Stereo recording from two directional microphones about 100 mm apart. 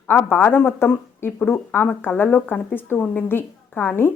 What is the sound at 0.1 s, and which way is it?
A woman's voice, 20° left (ahead or behind).